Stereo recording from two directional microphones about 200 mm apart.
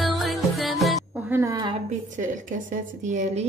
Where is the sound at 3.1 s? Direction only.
35° right (ahead or behind).